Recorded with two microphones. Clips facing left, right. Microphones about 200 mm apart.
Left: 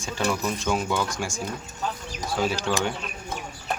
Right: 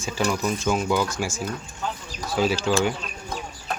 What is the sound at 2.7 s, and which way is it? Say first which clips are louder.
Speech: right 6 dB; 10° right (ahead or behind).